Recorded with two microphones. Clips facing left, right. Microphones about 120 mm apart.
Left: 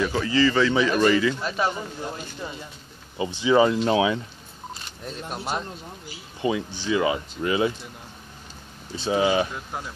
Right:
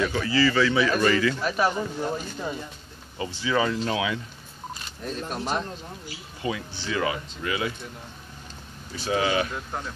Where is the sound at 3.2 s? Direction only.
20° left (ahead or behind).